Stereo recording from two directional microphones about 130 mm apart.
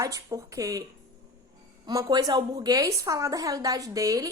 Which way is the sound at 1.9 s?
30° right (ahead or behind).